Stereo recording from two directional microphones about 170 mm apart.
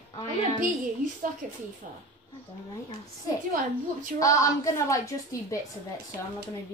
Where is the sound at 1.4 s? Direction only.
50° right (ahead or behind).